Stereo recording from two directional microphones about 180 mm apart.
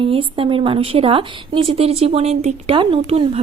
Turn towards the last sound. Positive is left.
turn(degrees=-35)  # may be behind; listen again after turning